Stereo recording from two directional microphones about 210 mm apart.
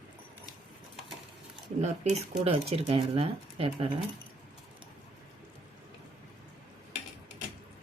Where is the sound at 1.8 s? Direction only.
30° right (ahead or behind).